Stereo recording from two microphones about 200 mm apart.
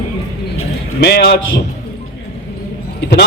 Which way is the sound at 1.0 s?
55° left (ahead or behind).